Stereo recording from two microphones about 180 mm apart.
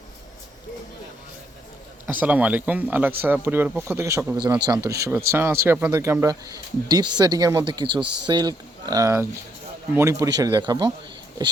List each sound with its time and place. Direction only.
2.0 s speech: 10° right (ahead or behind); by 10.9 s 25° right (ahead or behind)